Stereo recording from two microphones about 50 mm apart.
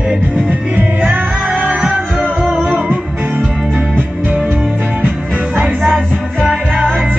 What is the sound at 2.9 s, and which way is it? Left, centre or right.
Music, right.